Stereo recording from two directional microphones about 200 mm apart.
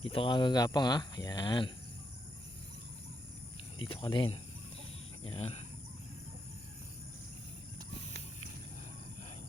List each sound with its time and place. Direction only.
0.0 s speech: 25° left (ahead or behind)
3.8 s speech: 25° left (ahead or behind)